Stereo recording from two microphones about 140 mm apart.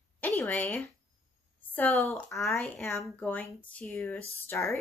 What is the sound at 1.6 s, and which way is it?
A woman's voice, 15° left (ahead or behind).